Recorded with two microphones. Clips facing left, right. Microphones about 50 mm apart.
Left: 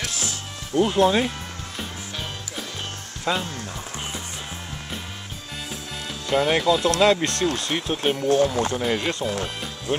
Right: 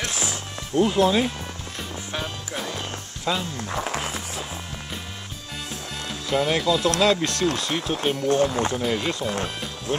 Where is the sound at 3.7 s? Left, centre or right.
Right.